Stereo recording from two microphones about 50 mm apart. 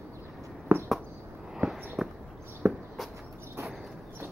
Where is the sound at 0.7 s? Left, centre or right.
Right.